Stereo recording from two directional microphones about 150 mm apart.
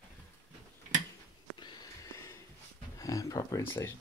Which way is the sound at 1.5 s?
30° left (ahead or behind).